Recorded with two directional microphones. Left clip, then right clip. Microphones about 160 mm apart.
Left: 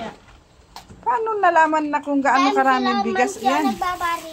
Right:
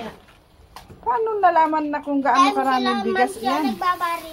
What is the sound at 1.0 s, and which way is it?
Speech, 20° left (ahead or behind).